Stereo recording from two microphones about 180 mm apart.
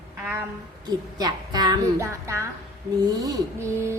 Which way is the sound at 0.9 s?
20° right (ahead or behind).